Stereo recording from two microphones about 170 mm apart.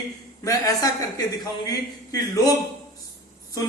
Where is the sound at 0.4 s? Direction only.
20° left (ahead or behind).